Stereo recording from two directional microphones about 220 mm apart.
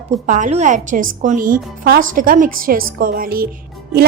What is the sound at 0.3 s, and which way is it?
A woman's voice, 35° right (ahead or behind).